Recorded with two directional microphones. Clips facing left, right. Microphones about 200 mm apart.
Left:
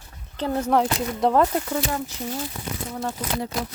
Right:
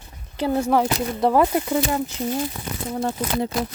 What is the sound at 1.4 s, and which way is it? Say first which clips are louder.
Speech: right 2 dB; 15° right (ahead or behind).